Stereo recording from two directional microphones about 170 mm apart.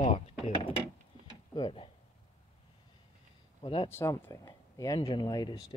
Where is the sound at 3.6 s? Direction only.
30° left (ahead or behind).